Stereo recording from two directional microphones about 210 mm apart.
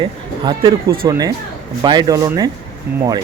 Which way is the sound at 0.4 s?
20° right (ahead or behind).